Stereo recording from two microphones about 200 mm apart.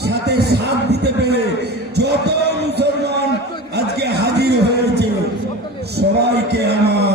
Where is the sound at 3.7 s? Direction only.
55° right (ahead or behind).